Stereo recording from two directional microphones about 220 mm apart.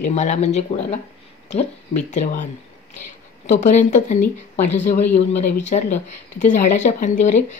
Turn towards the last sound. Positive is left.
turn(degrees=35)  # may be behind; listen again after turning